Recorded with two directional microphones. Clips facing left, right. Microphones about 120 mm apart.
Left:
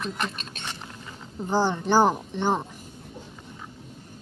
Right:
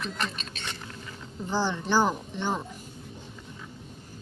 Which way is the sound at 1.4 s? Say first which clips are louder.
Left 5 dB; 50° left (ahead or behind).